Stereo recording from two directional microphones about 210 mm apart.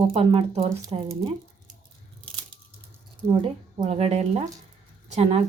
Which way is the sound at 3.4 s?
25° right (ahead or behind).